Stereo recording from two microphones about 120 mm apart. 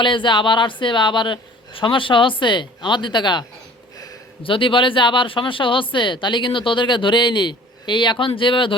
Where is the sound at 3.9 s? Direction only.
30° left (ahead or behind).